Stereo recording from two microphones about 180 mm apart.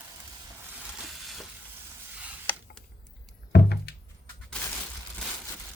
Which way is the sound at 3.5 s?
65° left (ahead or behind).